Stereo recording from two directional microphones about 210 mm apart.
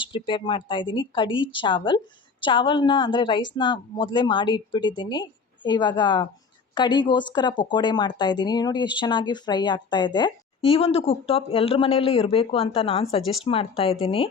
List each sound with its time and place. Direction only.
0.1 s speech: 20° left (ahead or behind)